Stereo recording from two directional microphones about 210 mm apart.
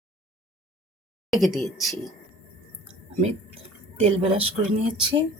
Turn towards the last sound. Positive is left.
turn(degrees=-25)  # may be behind; listen again after turning